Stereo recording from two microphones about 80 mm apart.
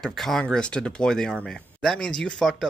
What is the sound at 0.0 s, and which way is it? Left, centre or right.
Speech, centre.